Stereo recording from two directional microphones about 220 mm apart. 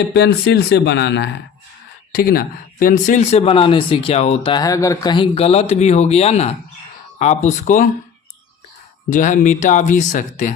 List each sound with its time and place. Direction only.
0.1 s speech: 45° left (ahead or behind)
9.0 s speech: 35° left (ahead or behind)